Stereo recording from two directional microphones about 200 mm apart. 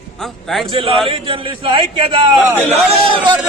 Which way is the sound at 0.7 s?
25° right (ahead or behind).